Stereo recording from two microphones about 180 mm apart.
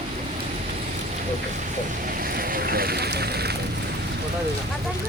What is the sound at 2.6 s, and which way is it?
Speech, 55° right (ahead or behind).